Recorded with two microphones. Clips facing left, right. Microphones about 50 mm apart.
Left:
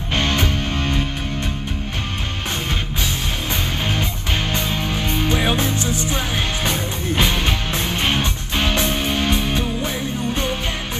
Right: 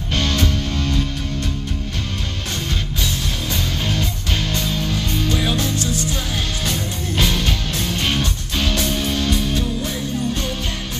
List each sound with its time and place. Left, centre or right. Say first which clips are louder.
0.1 s music: left 1 dB; left
4.5 s music: even; left